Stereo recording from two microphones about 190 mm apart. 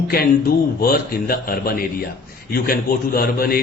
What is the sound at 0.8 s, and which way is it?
A man's voice, 50° left (ahead or behind).